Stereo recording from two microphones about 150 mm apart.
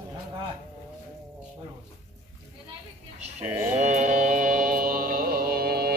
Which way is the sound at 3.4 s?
25° right (ahead or behind).